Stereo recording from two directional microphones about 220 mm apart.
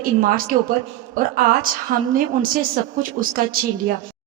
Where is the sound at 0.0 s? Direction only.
40° right (ahead or behind).